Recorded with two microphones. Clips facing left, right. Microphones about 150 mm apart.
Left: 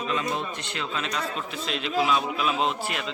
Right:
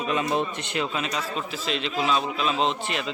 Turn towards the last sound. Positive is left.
turn(degrees=5)  # may be behind; listen again after turning